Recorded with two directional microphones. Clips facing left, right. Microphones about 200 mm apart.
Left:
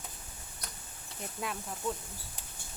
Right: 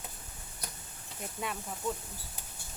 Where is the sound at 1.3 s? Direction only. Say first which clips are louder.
Even; centre (ahead or behind).